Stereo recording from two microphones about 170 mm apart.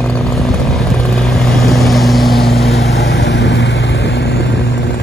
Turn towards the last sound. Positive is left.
turn(degrees=80)